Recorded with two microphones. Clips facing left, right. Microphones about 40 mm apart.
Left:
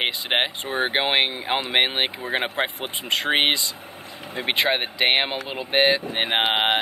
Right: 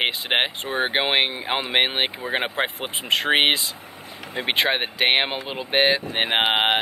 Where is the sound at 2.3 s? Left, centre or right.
Centre.